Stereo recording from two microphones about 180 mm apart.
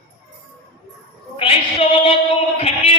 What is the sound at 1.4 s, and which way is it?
Female singing, 30° left (ahead or behind).